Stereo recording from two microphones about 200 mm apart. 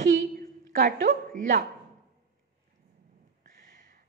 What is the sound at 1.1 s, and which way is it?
Speech, 40° right (ahead or behind).